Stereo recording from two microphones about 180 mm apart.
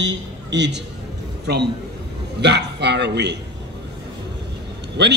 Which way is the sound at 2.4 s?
70° right (ahead or behind).